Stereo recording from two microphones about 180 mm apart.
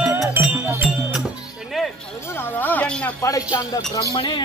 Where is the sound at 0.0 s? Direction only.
10° right (ahead or behind).